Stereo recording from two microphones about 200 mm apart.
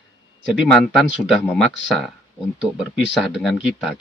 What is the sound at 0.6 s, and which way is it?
Speech, centre (ahead or behind).